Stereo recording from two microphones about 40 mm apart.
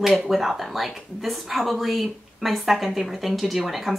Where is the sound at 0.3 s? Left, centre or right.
Centre.